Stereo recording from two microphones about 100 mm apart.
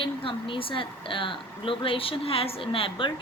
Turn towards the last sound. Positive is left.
turn(degrees=60)  # may be behind; listen again after turning